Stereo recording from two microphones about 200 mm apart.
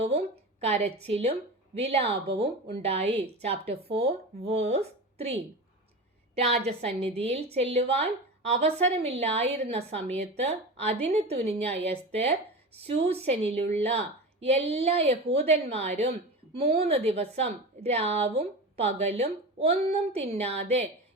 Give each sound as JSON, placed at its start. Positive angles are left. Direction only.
{"t": 0.0, "sound": "a woman's voice", "side_deg": -30}